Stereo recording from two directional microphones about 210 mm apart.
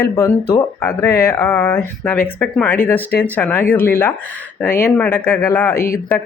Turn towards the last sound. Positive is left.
turn(degrees=45)  # may be behind; listen again after turning